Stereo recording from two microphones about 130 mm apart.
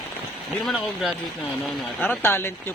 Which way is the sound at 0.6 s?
Centre (ahead or behind).